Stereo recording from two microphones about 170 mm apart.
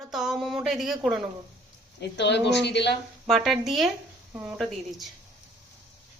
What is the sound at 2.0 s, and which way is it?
Speech, 90° left.